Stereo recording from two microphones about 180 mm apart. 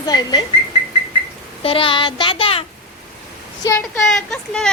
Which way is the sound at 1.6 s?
30° left (ahead or behind).